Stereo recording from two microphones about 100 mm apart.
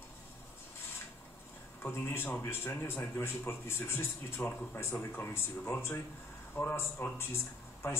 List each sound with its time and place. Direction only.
1.8 s speech: 25° left (ahead or behind)